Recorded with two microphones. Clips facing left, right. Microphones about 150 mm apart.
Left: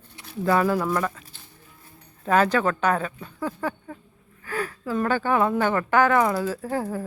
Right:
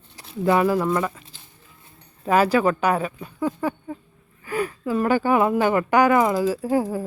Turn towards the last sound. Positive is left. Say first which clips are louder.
# right 5 dB
turn(degrees=-10)  # may be behind; listen again after turning